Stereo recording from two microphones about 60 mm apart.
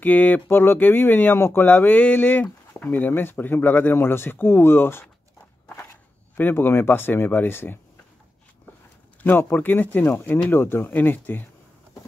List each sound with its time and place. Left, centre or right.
0.0 s speech: left
0.5 s speech: left
6.3 s speech: left
9.2 s speech: left